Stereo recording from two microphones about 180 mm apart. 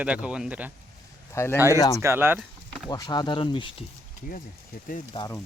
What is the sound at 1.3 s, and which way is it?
Speech, 15° left (ahead or behind).